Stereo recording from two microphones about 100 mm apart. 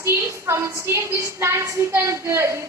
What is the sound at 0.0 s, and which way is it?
A woman's voice, 25° right (ahead or behind).